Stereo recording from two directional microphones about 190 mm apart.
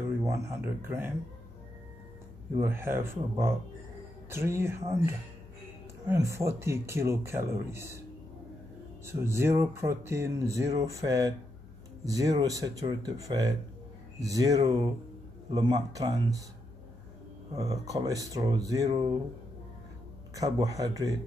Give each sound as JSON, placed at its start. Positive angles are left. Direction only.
{"t": 0.0, "sound": "a man's voice", "side_deg": -15}
{"t": 2.6, "sound": "speech", "side_deg": -10}
{"t": 9.0, "sound": "speech", "side_deg": -15}
{"t": 17.6, "sound": "speech", "side_deg": -15}
{"t": 20.3, "sound": "speech", "side_deg": -20}